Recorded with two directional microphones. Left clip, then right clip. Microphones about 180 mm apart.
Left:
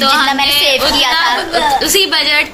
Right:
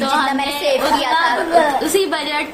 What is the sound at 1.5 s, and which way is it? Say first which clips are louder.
Speech: left 2 dB; 25° right (ahead or behind).